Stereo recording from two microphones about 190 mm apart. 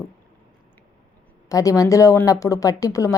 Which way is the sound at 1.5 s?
15° left (ahead or behind).